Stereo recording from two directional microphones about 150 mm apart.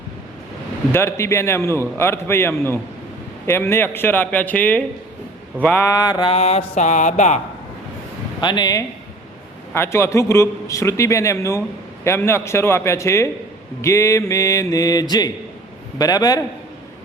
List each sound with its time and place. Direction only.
0.9 s a man's voice: 20° left (ahead or behind)
5.9 s a man's voice: 25° left (ahead or behind)
6.3 s a sound: 45° left (ahead or behind)
8.4 s a man's voice: 30° left (ahead or behind)
9.7 s a man's voice: 15° left (ahead or behind)